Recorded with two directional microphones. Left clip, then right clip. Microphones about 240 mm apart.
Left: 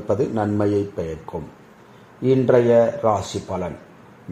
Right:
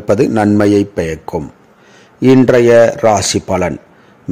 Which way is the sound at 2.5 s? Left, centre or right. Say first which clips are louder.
Right 6 dB; right.